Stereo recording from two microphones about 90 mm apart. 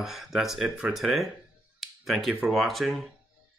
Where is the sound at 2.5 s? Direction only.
Centre (ahead or behind).